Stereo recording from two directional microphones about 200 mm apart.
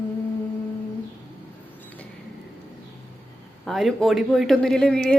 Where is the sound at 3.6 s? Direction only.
Centre (ahead or behind).